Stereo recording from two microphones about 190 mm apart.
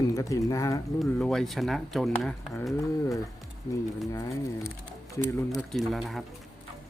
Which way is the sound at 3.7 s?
15° left (ahead or behind).